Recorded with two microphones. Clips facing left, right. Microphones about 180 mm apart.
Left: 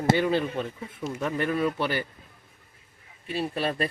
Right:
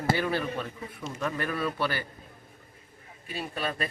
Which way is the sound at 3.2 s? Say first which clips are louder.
Left 5 dB; 30° left (ahead or behind).